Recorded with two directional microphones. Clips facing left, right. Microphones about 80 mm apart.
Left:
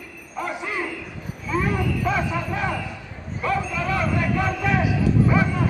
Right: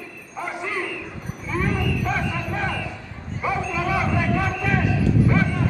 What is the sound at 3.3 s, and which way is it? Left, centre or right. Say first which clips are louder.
A man's voice: even; centre.